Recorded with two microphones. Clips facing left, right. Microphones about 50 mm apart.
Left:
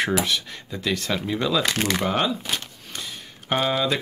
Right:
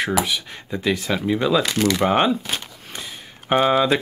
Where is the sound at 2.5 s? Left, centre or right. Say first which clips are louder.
Right 1 dB; centre.